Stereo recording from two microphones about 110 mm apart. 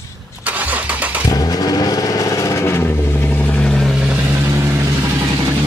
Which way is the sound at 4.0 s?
10° right (ahead or behind).